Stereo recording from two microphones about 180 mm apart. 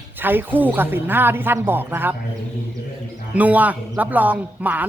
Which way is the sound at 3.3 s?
10° right (ahead or behind).